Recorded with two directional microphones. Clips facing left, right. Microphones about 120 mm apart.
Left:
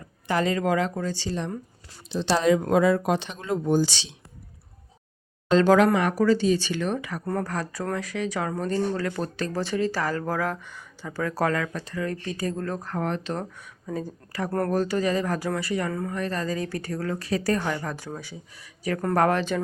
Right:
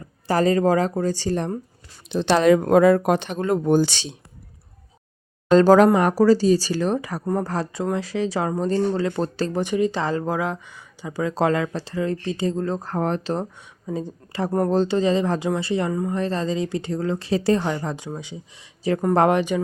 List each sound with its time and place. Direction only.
0.3 s speech: 40° right (ahead or behind)
2.1 s speech: 65° right (ahead or behind)
5.5 s speech: 40° right (ahead or behind)
9.6 s speech: 15° right (ahead or behind)
15.9 s speech: 15° right (ahead or behind)
16.1 s speech: 30° right (ahead or behind)